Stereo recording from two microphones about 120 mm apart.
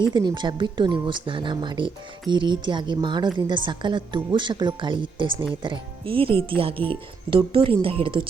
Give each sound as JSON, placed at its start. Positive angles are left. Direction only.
{"t": 0.0, "sound": "a woman's voice", "side_deg": -40}